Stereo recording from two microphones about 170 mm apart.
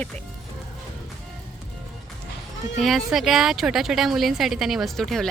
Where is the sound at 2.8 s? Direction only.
Centre (ahead or behind).